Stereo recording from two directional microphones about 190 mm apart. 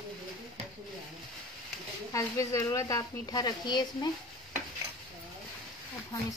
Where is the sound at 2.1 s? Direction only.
15° left (ahead or behind).